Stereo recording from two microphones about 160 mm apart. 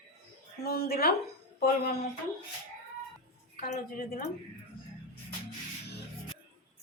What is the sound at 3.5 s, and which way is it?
Speech, 60° left (ahead or behind).